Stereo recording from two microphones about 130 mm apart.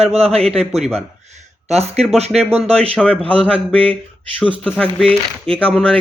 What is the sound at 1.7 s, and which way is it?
Speech, 55° right (ahead or behind).